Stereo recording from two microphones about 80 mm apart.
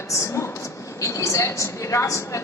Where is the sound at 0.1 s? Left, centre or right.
Left.